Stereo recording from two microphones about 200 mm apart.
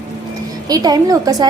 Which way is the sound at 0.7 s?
20° right (ahead or behind).